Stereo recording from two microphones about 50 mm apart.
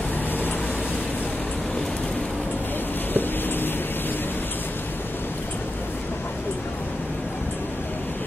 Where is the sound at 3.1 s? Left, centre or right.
Left.